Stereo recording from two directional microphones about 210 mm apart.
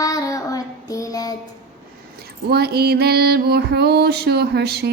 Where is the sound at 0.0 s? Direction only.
15° left (ahead or behind).